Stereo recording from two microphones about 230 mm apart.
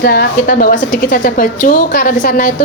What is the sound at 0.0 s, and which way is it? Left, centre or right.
A woman's voice, left.